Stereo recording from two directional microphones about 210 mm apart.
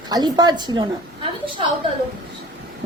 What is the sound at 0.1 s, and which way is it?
A woman's voice, 20° right (ahead or behind).